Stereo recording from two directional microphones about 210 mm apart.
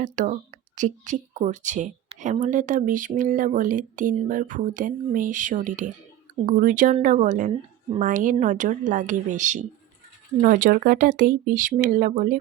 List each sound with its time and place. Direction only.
0.0 s a woman's voice: 35° right (ahead or behind)